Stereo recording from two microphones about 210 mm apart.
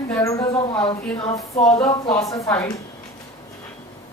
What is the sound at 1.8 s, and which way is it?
Speech, 15° left (ahead or behind).